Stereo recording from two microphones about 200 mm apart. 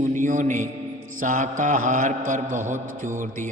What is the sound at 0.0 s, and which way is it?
Music, 40° right (ahead or behind).